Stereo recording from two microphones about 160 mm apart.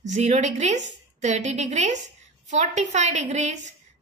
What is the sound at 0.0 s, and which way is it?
A woman's voice, 50° right (ahead or behind).